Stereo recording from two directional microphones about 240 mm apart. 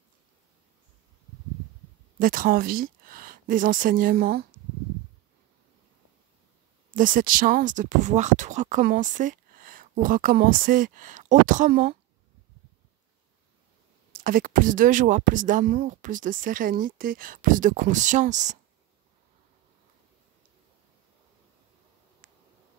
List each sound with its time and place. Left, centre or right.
2.1 s speech: right
6.9 s speech: right
14.1 s speech: right